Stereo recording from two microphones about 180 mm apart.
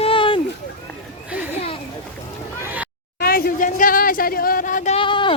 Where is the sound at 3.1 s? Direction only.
55° left (ahead or behind).